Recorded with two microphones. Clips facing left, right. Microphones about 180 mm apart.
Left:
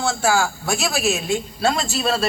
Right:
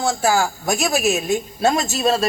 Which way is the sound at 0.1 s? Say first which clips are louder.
Right 1 dB; 15° right (ahead or behind).